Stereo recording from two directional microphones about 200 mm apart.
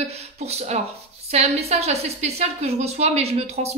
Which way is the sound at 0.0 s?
30° right (ahead or behind).